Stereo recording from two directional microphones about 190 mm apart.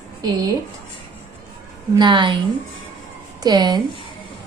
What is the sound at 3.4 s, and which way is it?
Speech, 20° right (ahead or behind).